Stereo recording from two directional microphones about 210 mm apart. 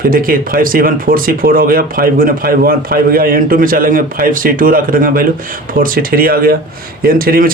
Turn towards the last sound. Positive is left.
turn(degrees=-45)  # may be behind; listen again after turning